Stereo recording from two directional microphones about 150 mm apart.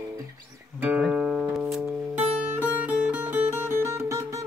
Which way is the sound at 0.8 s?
10° right (ahead or behind).